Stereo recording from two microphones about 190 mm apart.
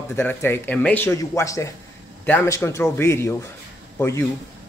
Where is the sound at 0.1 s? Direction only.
10° left (ahead or behind).